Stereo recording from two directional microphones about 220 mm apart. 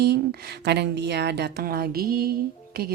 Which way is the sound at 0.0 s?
50° right (ahead or behind).